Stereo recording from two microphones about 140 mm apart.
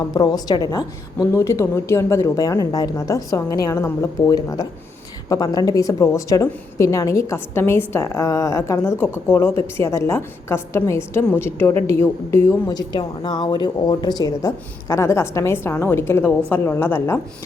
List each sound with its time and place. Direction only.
0.0 s a woman's voice: 30° left (ahead or behind)